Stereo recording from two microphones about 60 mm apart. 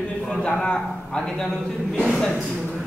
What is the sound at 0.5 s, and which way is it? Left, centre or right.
A man's voice, centre.